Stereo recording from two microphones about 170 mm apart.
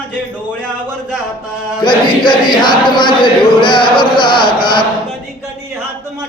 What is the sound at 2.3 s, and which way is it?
Speech, 25° left (ahead or behind).